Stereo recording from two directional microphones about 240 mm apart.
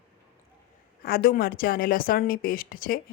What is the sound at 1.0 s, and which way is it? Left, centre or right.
A woman's voice, left.